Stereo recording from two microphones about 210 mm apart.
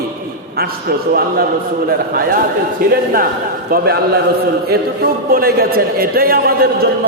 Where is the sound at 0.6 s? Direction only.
45° right (ahead or behind).